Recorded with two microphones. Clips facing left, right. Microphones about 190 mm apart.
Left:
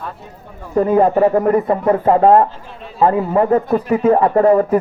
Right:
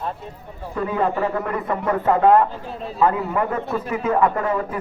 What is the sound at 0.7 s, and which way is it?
A man's voice, 45° left (ahead or behind).